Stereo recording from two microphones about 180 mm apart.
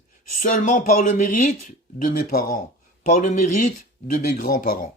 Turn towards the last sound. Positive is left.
turn(degrees=55)  # may be behind; listen again after turning